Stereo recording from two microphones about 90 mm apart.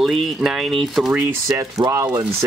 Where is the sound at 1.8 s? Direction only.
50° right (ahead or behind).